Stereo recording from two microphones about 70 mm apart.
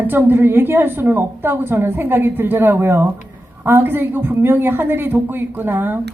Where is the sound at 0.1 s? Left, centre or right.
Right.